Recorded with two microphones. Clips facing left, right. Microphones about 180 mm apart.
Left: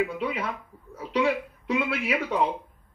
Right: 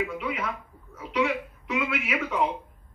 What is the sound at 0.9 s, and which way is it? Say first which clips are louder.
Speech: left 2 dB; 35° left (ahead or behind).